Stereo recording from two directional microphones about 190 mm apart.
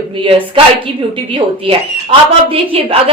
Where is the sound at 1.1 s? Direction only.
25° right (ahead or behind).